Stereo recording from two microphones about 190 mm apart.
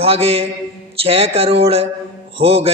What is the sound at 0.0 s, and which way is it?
A man's voice, 30° right (ahead or behind).